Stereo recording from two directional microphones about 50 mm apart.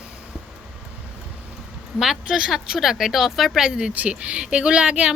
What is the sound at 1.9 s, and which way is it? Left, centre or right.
A woman's voice, centre.